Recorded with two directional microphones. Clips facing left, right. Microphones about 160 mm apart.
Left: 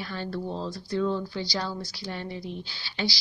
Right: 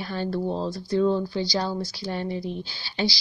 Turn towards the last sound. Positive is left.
turn(degrees=-35)  # may be behind; listen again after turning